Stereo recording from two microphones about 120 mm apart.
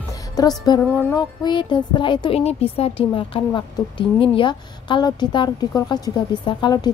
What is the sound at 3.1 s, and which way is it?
A woman's voice, 45° left (ahead or behind).